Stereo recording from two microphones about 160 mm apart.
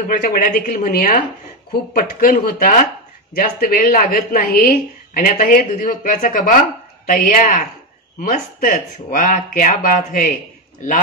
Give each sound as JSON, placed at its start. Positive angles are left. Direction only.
{"t": 0.1, "sound": "a woman's voice", "side_deg": 60}